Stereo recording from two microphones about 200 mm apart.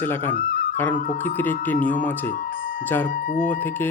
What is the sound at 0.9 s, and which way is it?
Speech, 40° left (ahead or behind).